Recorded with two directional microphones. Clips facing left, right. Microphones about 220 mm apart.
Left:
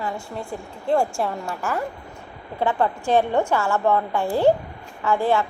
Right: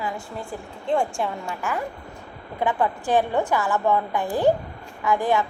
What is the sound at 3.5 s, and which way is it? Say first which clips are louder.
A woman's voice: left 1 dB; 15° right (ahead or behind).